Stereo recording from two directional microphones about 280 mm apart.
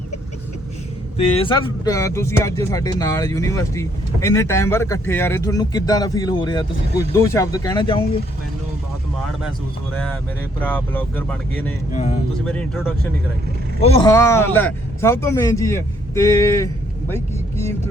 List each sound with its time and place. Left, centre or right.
1.1 s speech: centre
9.9 s speech: centre
11.9 s speech: left
12.5 s speech: centre
13.8 s speech: centre